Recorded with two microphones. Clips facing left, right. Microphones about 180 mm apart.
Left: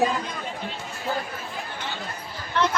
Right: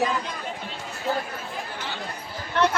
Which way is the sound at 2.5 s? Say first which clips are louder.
Right 2 dB; 55° right (ahead or behind).